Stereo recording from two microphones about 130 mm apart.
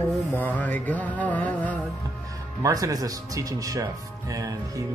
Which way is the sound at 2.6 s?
25° right (ahead or behind).